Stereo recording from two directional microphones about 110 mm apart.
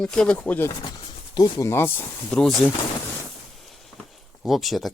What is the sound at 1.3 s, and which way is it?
Speech, 35° left (ahead or behind).